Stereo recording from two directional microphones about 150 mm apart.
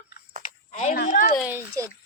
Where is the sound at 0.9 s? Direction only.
70° left (ahead or behind).